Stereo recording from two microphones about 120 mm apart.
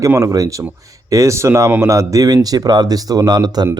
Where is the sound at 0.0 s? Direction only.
25° right (ahead or behind).